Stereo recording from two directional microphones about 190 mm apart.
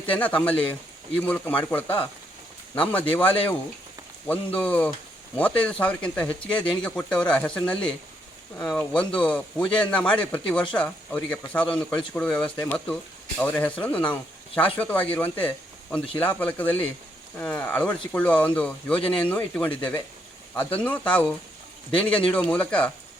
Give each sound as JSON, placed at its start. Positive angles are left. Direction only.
{"t": 0.0, "sound": "speech", "side_deg": 10}